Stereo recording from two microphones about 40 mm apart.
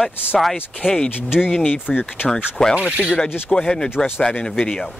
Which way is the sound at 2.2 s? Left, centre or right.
Centre.